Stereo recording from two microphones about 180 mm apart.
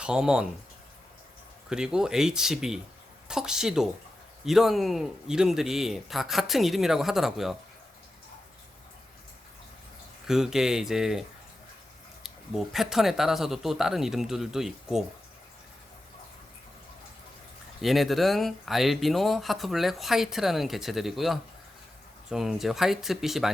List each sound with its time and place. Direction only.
0.0 s speech: 5° right (ahead or behind)
1.7 s speech: 5° right (ahead or behind)
10.2 s speech: centre (ahead or behind)
17.8 s speech: centre (ahead or behind)